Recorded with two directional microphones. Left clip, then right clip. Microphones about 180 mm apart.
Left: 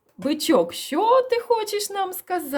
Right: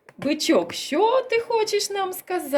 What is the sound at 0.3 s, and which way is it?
Speech, 45° left (ahead or behind).